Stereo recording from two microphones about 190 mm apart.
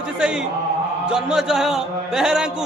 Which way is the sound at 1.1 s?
5° right (ahead or behind).